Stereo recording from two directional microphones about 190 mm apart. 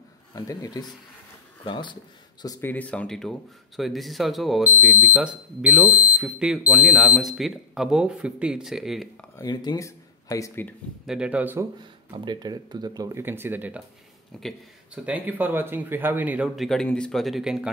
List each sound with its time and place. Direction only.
0.3 s a man's voice: 20° left (ahead or behind); by 9.1 s centre (ahead or behind)
9.4 s speech: 20° left (ahead or behind)
11.1 s speech: 5° right (ahead or behind)
12.3 s speech: 25° right (ahead or behind)
14.3 s speech: 5° left (ahead or behind)
15.0 s speech: 10° right (ahead or behind)